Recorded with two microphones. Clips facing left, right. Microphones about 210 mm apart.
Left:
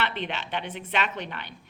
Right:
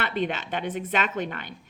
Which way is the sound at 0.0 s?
45° right (ahead or behind).